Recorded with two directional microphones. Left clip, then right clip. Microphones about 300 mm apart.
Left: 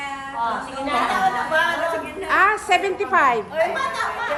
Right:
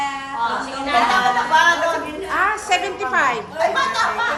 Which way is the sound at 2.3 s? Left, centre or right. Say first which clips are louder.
Left 2 dB; left.